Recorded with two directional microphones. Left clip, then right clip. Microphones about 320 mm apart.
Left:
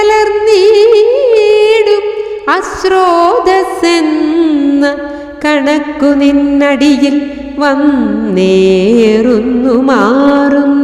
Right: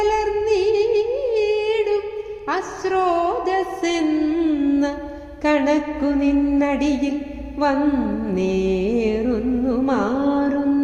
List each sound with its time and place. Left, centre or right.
0.0 s music: left
8.4 s music: left